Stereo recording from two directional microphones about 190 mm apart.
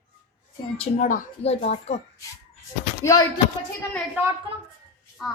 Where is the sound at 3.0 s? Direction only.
20° left (ahead or behind).